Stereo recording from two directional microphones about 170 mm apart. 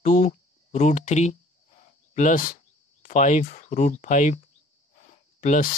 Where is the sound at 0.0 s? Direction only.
45° left (ahead or behind).